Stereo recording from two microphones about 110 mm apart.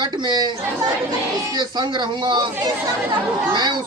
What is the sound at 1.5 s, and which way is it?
Speech, 45° right (ahead or behind).